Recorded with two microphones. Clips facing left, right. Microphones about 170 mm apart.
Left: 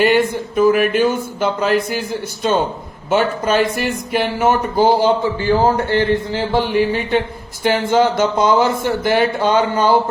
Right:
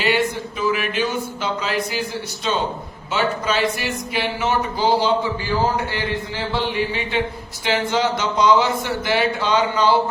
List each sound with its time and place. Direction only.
0.0 s speech: 50° left (ahead or behind)